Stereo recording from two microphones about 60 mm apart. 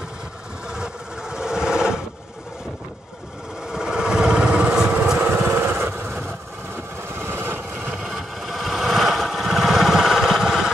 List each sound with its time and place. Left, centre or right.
0.7 s vehicle: centre
3.7 s vehicle: centre
5.2 s vehicle: right
7.2 s vehicle: right
8.0 s vehicle: centre